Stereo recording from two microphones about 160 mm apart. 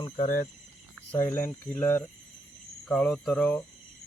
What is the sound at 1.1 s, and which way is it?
Speech, 15° left (ahead or behind).